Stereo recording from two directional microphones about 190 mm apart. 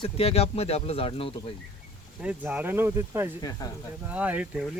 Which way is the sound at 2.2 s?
10° right (ahead or behind).